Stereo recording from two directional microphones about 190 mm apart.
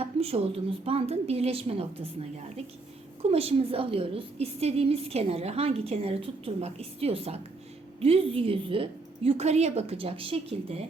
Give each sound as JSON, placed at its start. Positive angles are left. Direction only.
{"t": 0.0, "sound": "a woman's voice", "side_deg": -30}
{"t": 3.2, "sound": "a woman's voice", "side_deg": -30}